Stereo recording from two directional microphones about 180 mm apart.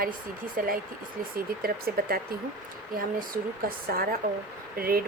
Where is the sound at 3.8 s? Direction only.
55° right (ahead or behind).